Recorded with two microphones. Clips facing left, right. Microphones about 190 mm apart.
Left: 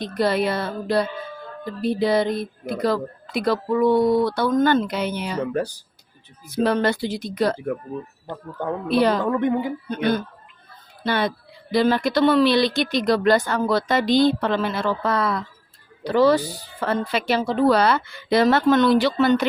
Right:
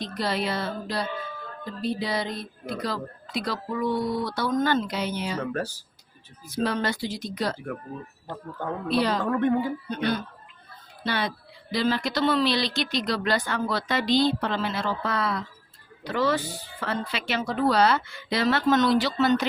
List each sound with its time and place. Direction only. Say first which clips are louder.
0.0 s speech: left 7 dB; 55° left (ahead or behind)
6.5 s speech: left 6 dB; 55° left (ahead or behind)
8.9 s speech: left 5 dB; 55° left (ahead or behind)
9.3 s a woman's voice: left 2 dB; 20° left (ahead or behind)
9.9 s speech: left 8 dB; 50° left (ahead or behind)
16.0 s speech: left 8 dB; 35° left (ahead or behind)
17.3 s a woman's voice: left 5 dB; 30° left (ahead or behind)
17.7 s speech: left 1 dB; 60° left (ahead or behind)